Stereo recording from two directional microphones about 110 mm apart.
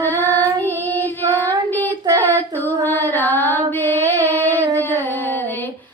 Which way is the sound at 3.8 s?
20° left (ahead or behind).